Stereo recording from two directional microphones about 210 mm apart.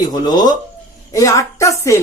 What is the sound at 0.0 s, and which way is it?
A woman's voice, 20° left (ahead or behind).